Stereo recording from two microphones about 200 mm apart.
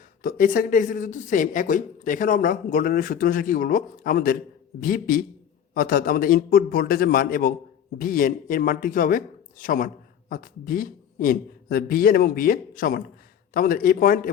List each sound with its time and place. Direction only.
0.2 s speech: 45° left (ahead or behind)